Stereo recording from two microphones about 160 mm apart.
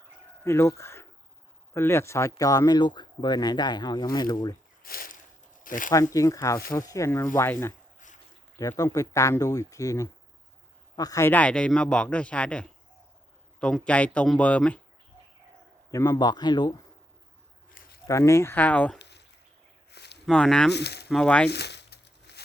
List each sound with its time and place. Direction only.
0.4 s speech: 15° left (ahead or behind)
4.8 s a sound: 65° left (ahead or behind)
5.6 s speech: 60° left (ahead or behind)
5.9 s a man's voice: 20° left (ahead or behind)
15.9 s speech: 20° left (ahead or behind)
18.1 s a man's voice: 20° left (ahead or behind)
18.9 s a sound: 90° left
20.2 s speech: 5° left (ahead or behind)
20.7 s speech: 90° left
21.1 s a man's voice: 5° left (ahead or behind)
21.5 s a sound: 90° left